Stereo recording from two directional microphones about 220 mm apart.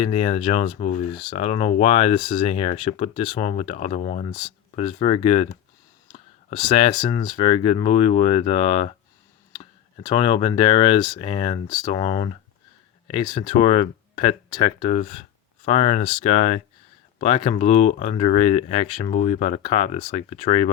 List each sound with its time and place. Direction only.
0.0 s speech: 25° left (ahead or behind)
4.3 s speech: 20° left (ahead or behind)
10.0 s speech: 20° left (ahead or behind)